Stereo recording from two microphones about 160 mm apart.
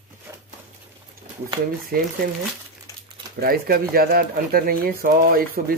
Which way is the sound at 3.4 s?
70° right (ahead or behind).